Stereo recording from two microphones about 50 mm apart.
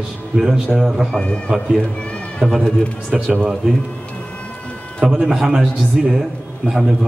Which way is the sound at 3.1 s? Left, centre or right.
Centre.